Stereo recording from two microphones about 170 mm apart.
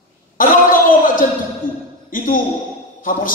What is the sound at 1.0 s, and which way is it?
Speech, 55° left (ahead or behind).